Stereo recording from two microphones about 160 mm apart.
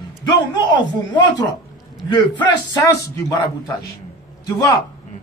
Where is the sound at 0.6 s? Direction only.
30° left (ahead or behind).